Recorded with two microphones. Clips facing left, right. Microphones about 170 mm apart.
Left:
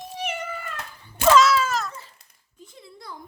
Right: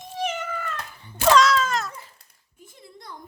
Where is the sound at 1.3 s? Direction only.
5° left (ahead or behind).